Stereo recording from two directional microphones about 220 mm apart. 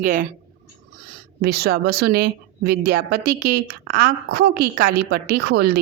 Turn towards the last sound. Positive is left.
turn(degrees=-45)  # may be behind; listen again after turning